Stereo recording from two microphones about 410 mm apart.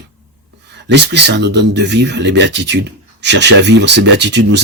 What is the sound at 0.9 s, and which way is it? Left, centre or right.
Speech, right.